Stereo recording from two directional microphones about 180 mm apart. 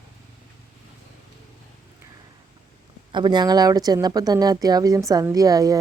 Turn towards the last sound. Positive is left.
turn(degrees=-20)  # may be behind; listen again after turning